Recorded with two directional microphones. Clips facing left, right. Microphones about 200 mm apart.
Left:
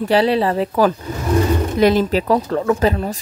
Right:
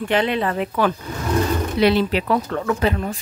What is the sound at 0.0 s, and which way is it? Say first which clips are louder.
Speech: left 5 dB; 35° left (ahead or behind).